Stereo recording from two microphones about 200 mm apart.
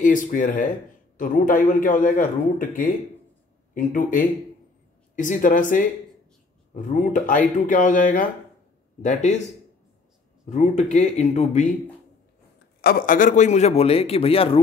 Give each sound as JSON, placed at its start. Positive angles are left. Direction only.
{"t": 0.0, "sound": "a man's voice", "side_deg": 40}
{"t": 3.7, "sound": "a man's voice", "side_deg": 40}
{"t": 10.5, "sound": "a man's voice", "side_deg": 35}
{"t": 12.8, "sound": "a man's voice", "side_deg": 40}